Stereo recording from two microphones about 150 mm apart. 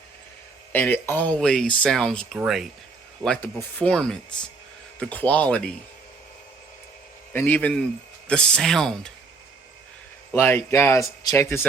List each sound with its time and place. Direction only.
0.7 s speech: 15° left (ahead or behind); by 2.6 s centre (ahead or behind)
3.2 s speech: 10° left (ahead or behind)
7.3 s speech: 15° left (ahead or behind)
10.3 s speech: 15° left (ahead or behind)